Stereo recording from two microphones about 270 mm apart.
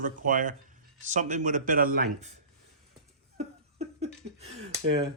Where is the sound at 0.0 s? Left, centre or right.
Right.